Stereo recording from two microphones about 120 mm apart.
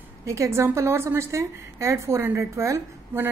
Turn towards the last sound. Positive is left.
turn(degrees=-20)  # may be behind; listen again after turning